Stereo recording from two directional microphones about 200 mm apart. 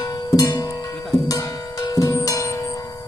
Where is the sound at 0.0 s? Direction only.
20° left (ahead or behind).